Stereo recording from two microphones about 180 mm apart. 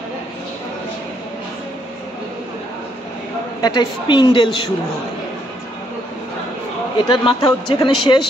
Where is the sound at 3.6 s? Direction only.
25° left (ahead or behind).